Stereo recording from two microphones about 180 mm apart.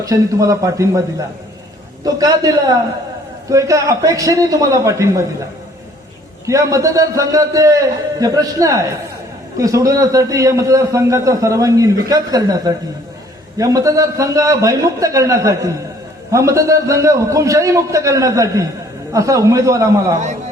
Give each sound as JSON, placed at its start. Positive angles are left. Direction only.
{"t": 0.0, "sound": "a man's voice", "side_deg": -20}
{"t": 2.0, "sound": "a man's voice", "side_deg": -20}
{"t": 6.4, "sound": "a man's voice", "side_deg": -20}